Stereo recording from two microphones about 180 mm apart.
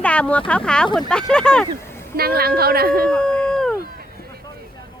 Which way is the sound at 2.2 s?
60° right (ahead or behind).